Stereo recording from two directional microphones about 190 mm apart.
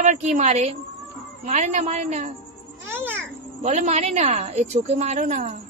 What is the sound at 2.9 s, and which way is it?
Music, 10° right (ahead or behind).